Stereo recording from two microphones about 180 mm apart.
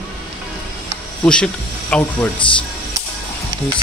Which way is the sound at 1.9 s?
5° left (ahead or behind).